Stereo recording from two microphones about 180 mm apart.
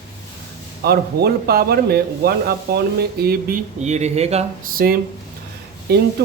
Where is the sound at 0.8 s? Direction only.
60° right (ahead or behind); by 4.5 s 35° right (ahead or behind).